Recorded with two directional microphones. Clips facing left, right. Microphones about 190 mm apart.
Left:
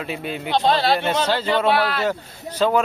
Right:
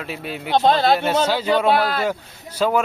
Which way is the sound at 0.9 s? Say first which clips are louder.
Right 2 dB; 5° right (ahead or behind).